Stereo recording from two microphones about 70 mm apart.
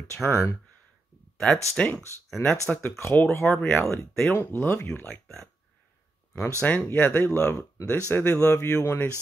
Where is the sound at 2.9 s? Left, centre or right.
Left.